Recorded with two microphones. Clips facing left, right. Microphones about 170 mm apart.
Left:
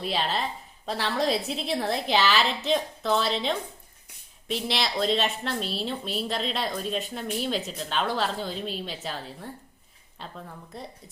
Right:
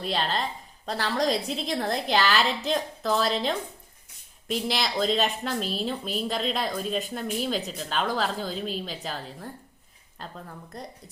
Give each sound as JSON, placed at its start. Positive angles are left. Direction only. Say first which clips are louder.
{"t": 0.0, "sound": "a woman's voice", "louder": "even", "side_deg": 5}